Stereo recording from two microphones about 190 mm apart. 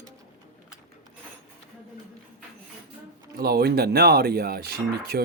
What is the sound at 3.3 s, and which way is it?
Speech, 55° right (ahead or behind).